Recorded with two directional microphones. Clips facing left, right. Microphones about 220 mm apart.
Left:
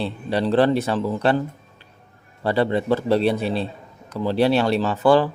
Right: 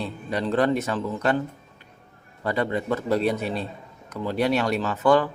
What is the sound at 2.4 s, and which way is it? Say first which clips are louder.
Speech: left 5 dB; 30° left (ahead or behind).